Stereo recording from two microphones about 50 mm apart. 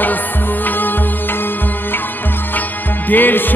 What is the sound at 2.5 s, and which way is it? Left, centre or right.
Music, left.